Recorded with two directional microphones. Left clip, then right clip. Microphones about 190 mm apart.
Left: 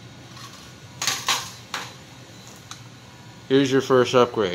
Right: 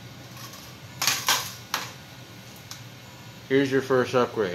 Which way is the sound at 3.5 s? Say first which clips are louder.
Left 4 dB; 50° left (ahead or behind).